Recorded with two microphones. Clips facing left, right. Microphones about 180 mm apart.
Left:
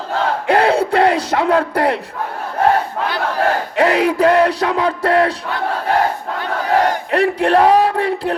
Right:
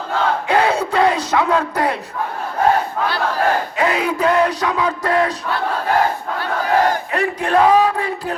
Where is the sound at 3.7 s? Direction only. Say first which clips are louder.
Left 4 dB; 65° left (ahead or behind).